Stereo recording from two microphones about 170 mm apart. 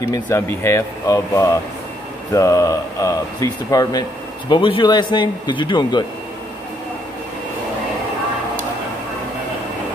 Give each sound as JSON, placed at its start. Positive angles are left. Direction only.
{"t": 0.0, "sound": "speech", "side_deg": 15}